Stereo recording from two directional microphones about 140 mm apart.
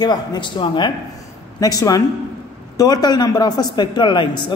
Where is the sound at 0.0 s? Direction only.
30° left (ahead or behind).